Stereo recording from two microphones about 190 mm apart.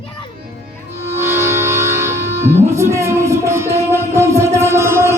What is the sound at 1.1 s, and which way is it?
Music, 15° right (ahead or behind).